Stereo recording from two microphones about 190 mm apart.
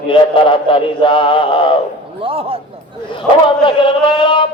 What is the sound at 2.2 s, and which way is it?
Speech, 30° right (ahead or behind).